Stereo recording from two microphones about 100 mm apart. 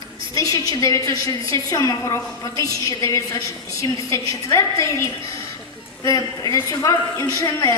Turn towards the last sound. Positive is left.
turn(degrees=35)  # may be behind; listen again after turning